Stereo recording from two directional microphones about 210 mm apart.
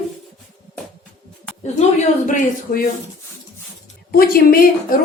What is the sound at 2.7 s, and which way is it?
Speech, 35° left (ahead or behind).